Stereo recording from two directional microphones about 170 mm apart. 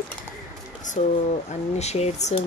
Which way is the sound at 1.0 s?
40° left (ahead or behind).